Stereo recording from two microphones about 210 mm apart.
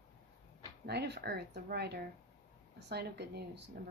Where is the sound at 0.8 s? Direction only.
50° right (ahead or behind).